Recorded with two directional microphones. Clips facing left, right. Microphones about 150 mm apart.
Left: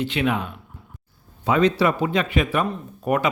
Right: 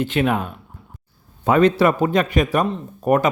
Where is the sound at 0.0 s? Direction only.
45° right (ahead or behind).